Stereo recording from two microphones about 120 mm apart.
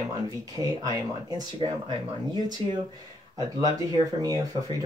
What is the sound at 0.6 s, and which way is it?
Speech, 30° right (ahead or behind).